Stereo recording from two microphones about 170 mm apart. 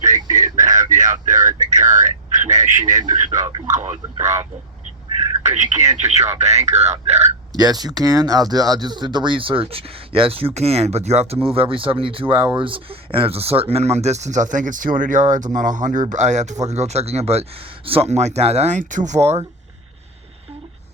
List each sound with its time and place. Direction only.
0.0 s a sound: 45° right (ahead or behind)
3.3 s speech: 20° right (ahead or behind)
3.7 s speech: 40° right (ahead or behind)
5.4 s speech: 45° right (ahead or behind)
7.5 s speech: 25° right (ahead or behind); by 19.4 s 40° right (ahead or behind)